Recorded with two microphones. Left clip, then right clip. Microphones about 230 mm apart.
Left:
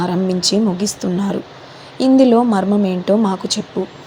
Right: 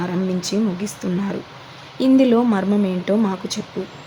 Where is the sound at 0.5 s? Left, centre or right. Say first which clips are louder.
Left 5 dB; centre.